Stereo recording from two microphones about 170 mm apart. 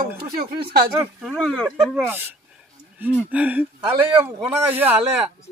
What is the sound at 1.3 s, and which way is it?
Speech, 5° left (ahead or behind).